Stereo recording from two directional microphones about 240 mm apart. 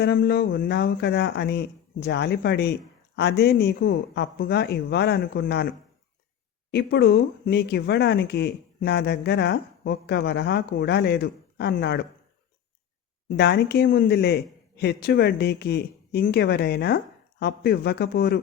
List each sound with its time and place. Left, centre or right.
0.0 s speech: left
13.2 s speech: left